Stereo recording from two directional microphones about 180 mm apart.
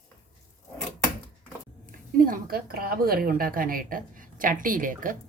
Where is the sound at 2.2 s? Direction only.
55° right (ahead or behind).